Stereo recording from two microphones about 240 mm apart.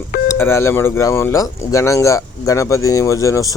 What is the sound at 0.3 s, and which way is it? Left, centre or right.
A man's voice, centre.